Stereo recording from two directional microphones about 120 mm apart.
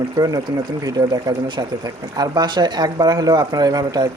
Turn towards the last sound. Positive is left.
turn(degrees=-35)  # may be behind; listen again after turning